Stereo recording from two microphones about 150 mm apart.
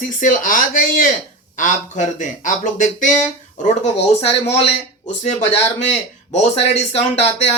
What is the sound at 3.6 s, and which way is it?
Speech, 45° left (ahead or behind).